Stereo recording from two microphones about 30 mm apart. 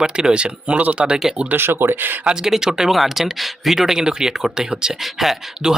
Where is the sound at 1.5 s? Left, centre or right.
Right.